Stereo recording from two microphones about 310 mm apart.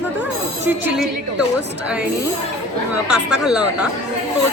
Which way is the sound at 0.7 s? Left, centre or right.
Centre.